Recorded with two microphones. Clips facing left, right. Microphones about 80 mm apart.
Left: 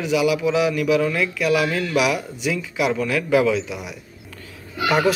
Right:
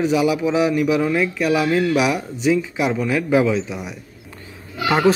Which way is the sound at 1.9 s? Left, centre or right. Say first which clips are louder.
Right 1 dB; right.